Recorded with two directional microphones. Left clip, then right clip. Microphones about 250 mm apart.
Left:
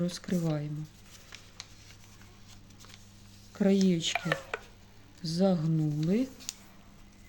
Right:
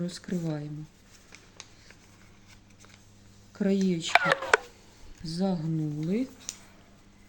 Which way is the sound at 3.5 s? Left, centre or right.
Centre.